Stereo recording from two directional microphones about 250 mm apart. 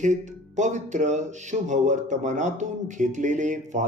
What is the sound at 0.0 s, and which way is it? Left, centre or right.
Speech, right.